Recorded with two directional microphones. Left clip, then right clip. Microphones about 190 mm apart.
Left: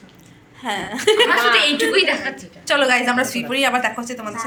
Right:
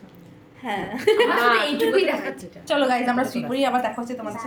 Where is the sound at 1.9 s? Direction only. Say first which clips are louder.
Left 4 dB; 45° right (ahead or behind).